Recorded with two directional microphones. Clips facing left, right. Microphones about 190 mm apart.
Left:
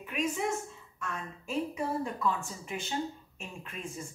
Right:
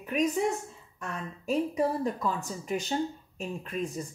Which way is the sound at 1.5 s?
40° right (ahead or behind).